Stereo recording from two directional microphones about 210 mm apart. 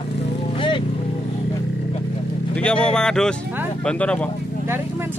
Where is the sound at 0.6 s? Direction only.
20° left (ahead or behind).